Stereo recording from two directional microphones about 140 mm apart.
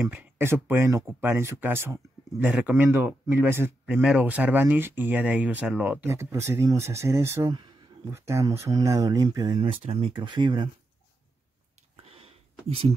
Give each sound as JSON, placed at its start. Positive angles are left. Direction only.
{"t": 0.1, "sound": "speech", "side_deg": -15}
{"t": 9.6, "sound": "speech", "side_deg": -40}
{"t": 12.0, "sound": "a sound", "side_deg": -45}